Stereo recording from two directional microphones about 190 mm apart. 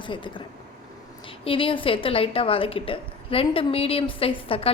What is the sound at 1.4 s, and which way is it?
A woman's voice, 30° left (ahead or behind).